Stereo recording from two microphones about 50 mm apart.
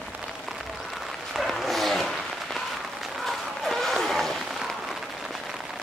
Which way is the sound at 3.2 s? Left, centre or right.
Centre.